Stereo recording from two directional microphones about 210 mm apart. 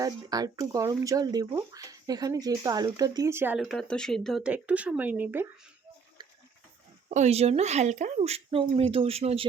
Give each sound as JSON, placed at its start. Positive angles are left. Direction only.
{"t": 0.0, "sound": "speech", "side_deg": -20}
{"t": 7.1, "sound": "speech", "side_deg": -30}